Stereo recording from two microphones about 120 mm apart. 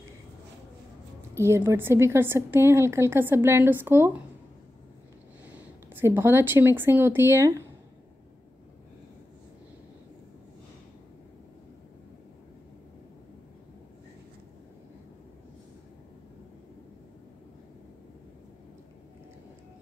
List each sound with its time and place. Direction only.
1.3 s a woman's voice: 20° right (ahead or behind)
5.5 s speech: 20° right (ahead or behind)